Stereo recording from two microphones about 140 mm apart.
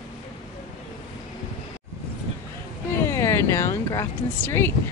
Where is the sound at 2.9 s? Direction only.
20° left (ahead or behind).